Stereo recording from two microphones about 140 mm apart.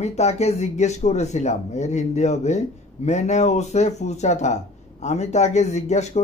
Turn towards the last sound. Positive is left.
turn(degrees=55)  # may be behind; listen again after turning